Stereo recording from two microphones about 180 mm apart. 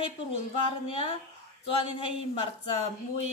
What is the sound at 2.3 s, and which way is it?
Speech, 30° left (ahead or behind).